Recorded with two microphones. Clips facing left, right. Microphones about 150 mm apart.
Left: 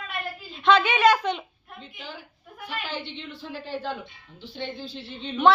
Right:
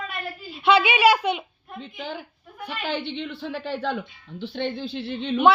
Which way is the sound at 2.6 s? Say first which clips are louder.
Right 4 dB; 65° right (ahead or behind).